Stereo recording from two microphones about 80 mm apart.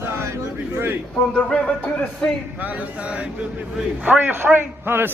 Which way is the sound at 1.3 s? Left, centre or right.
Centre.